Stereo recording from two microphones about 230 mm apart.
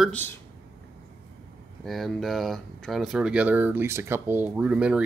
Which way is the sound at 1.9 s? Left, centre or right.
Centre.